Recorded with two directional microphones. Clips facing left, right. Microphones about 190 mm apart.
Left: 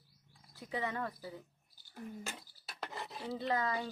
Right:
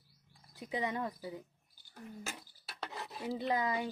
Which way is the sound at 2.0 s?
Centre (ahead or behind).